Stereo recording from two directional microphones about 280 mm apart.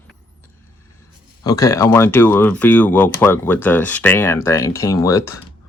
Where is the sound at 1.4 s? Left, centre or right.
Centre.